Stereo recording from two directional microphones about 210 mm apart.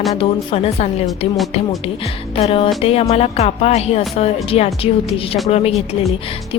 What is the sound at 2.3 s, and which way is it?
A woman's voice, 30° left (ahead or behind).